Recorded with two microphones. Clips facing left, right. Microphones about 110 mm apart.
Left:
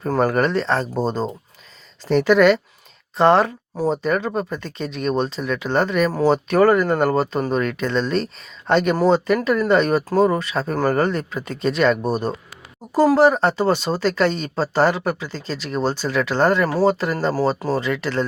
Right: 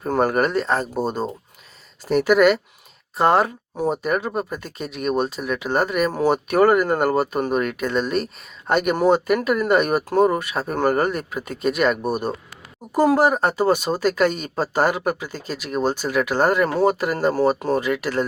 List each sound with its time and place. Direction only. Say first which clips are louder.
0.0 s speech: left 1 dB; 25° right (ahead or behind)
0.3 s speech: left 1 dB; 10° right (ahead or behind)
6.1 s speech: left 2 dB; 25° right (ahead or behind)
7.5 s speech: left 1 dB; 15° right (ahead or behind)
11.0 s speech: left 1 dB; 15° right (ahead or behind)